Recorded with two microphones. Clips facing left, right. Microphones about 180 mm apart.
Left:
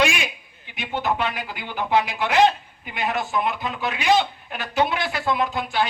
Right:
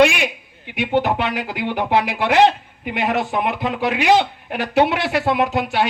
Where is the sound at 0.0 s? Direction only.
65° right (ahead or behind).